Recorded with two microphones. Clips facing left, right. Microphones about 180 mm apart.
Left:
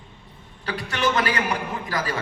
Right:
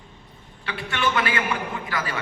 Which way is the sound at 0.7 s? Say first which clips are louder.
Left 2 dB; 40° left (ahead or behind).